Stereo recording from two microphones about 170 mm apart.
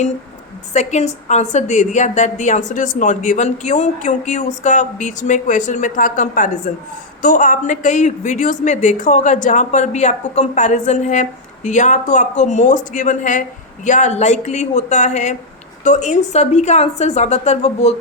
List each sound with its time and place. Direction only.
0.7 s a woman's voice: 40° left (ahead or behind)